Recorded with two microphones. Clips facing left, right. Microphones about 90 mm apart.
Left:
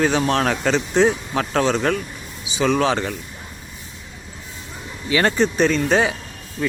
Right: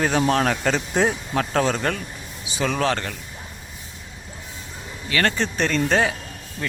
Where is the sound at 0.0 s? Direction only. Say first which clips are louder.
Left 1 dB; centre (ahead or behind).